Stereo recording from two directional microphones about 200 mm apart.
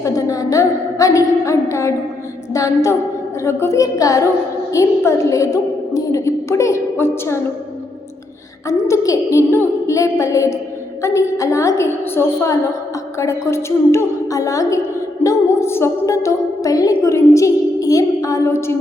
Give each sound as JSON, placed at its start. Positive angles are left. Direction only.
{"t": 0.0, "sound": "a woman's voice", "side_deg": 15}
{"t": 8.6, "sound": "a woman's voice", "side_deg": 15}